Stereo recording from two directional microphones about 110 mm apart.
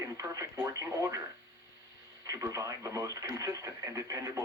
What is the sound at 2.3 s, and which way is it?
Speech, 30° right (ahead or behind).